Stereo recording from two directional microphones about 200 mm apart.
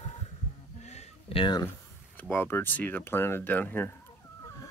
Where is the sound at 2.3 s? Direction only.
10° left (ahead or behind).